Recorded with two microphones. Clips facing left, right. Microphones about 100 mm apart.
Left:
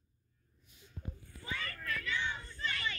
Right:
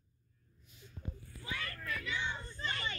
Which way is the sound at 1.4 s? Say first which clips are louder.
Left 1 dB; 5° right (ahead or behind).